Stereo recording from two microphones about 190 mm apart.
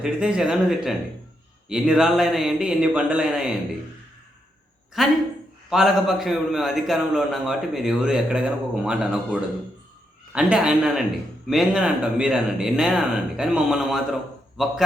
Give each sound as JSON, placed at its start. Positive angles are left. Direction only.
{"t": 0.0, "sound": "a man's voice", "side_deg": -5}
{"t": 4.9, "sound": "a man's voice", "side_deg": 0}